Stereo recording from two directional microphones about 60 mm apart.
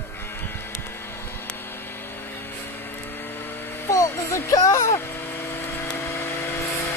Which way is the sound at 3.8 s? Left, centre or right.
Left.